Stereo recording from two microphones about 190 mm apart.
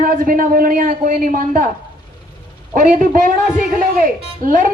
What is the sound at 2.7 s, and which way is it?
A man's voice, 45° right (ahead or behind).